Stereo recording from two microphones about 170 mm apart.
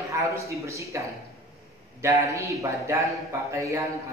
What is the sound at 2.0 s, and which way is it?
A man's voice, 20° right (ahead or behind).